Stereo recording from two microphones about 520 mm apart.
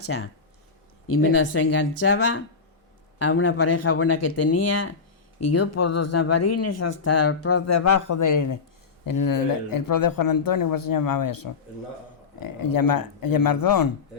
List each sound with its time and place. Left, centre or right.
0.0 s speech: left